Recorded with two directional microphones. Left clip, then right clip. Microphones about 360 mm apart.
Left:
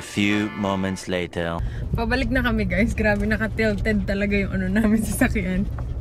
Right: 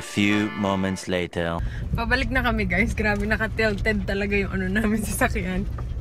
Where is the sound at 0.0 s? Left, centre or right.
Centre.